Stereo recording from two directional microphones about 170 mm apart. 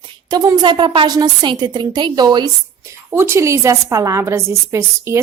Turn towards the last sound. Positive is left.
turn(degrees=-15)  # may be behind; listen again after turning